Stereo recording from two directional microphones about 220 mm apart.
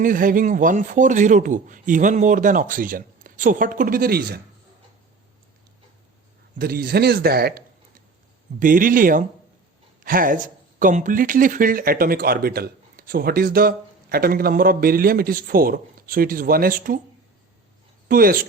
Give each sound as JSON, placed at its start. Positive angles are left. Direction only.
{"t": 0.0, "sound": "speech", "side_deg": -40}
{"t": 6.6, "sound": "speech", "side_deg": -45}
{"t": 18.1, "sound": "speech", "side_deg": -40}